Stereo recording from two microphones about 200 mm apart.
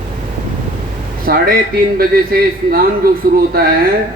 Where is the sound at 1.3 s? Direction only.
45° right (ahead or behind).